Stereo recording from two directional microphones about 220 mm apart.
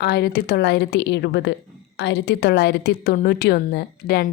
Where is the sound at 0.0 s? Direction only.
45° left (ahead or behind).